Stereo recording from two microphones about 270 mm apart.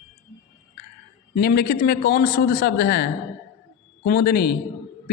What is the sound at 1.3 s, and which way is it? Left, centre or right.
A man's voice, left.